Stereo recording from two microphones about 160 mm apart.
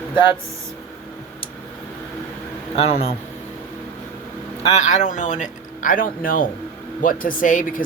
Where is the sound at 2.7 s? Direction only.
40° left (ahead or behind).